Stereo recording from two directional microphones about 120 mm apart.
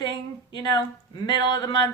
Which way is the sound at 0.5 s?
30° left (ahead or behind).